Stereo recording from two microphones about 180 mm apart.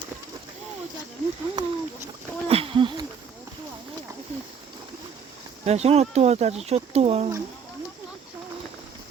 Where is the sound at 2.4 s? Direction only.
30° right (ahead or behind).